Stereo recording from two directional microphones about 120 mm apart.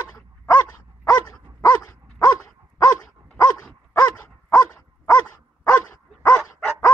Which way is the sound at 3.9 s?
25° left (ahead or behind).